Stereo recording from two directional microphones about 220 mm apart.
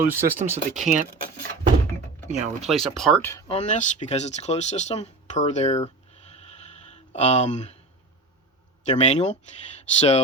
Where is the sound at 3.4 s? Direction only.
25° left (ahead or behind).